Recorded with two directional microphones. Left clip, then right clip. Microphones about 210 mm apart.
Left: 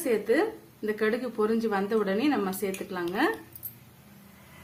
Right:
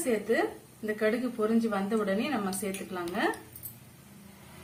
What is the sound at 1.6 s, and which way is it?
Speech, 55° left (ahead or behind).